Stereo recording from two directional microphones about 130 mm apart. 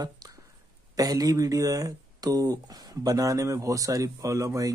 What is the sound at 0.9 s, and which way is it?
Speech, 30° right (ahead or behind).